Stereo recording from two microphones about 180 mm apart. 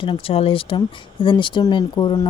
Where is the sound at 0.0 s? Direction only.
30° left (ahead or behind).